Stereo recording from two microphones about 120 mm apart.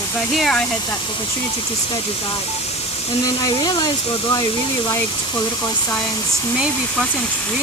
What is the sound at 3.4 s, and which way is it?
Speech, 35° left (ahead or behind).